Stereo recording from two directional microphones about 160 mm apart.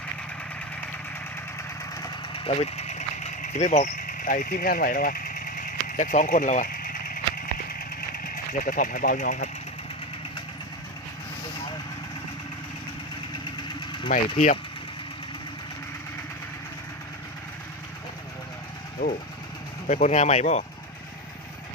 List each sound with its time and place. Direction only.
1.5 s engine: 20° left (ahead or behind)
2.3 s vehicle: 35° left (ahead or behind)
14.1 s speech: 45° left (ahead or behind)
19.0 s speech: 65° left (ahead or behind)
19.9 s speech: 45° left (ahead or behind)